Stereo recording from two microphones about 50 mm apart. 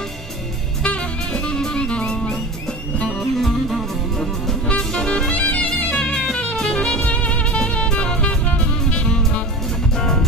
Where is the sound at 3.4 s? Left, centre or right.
Centre.